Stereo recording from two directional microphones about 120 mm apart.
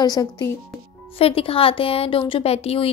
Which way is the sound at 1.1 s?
50° left (ahead or behind).